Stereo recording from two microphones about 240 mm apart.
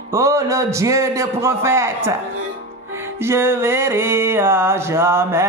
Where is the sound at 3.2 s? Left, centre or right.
Centre.